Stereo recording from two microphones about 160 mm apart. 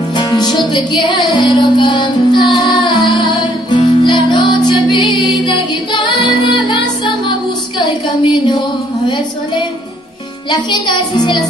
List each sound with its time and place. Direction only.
0.2 s music: 25° left (ahead or behind)
10.5 s music: 30° left (ahead or behind)